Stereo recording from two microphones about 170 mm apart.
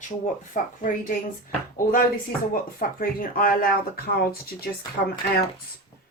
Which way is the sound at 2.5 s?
55° left (ahead or behind).